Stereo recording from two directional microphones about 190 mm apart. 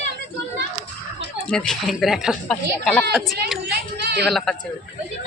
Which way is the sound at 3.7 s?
60° right (ahead or behind).